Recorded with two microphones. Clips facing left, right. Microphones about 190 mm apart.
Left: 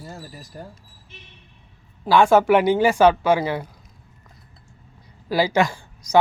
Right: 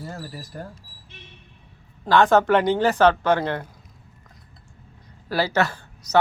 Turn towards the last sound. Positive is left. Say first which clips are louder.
# left 2 dB
turn(degrees=10)  # may be behind; listen again after turning